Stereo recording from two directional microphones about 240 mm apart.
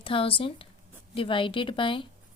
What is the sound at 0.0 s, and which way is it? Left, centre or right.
A woman's voice, left.